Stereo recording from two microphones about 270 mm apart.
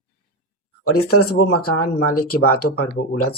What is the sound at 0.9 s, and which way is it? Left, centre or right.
Speech, left.